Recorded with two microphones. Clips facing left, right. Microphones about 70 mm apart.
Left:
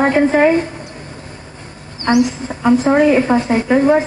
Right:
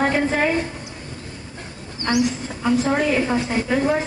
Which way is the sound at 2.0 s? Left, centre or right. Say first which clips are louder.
Left 6 dB; left.